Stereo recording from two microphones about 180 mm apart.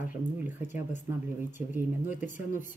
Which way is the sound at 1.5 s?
10° right (ahead or behind).